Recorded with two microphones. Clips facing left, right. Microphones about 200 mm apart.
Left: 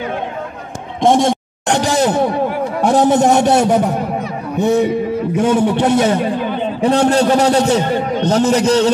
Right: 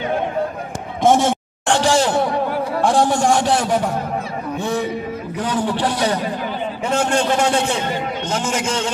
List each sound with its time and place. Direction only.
1.7 s a sound: 20° left (ahead or behind)
2.8 s a man's voice: 20° left (ahead or behind)
6.8 s a man's voice: 35° left (ahead or behind)